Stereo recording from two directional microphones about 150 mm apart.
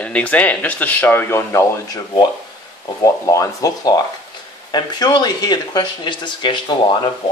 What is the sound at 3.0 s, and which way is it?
Speech, 20° left (ahead or behind).